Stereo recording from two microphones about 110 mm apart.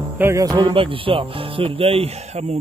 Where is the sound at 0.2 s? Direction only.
25° right (ahead or behind).